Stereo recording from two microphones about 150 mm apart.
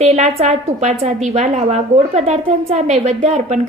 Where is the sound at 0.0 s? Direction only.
45° right (ahead or behind).